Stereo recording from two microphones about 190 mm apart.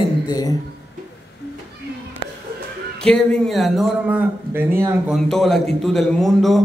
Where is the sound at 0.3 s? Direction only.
20° left (ahead or behind).